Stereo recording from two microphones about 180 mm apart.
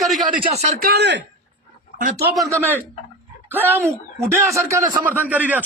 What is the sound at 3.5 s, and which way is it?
Speech, 10° right (ahead or behind).